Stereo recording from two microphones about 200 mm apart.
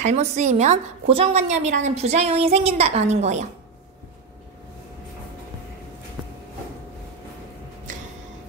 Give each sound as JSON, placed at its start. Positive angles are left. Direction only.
{"t": 0.0, "sound": "a woman's voice", "side_deg": -35}